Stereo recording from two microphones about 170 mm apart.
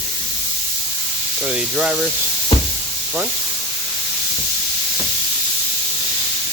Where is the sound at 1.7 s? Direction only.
5° right (ahead or behind).